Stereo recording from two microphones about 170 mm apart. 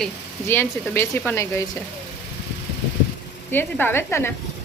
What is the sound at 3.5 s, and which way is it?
Speech, 10° left (ahead or behind).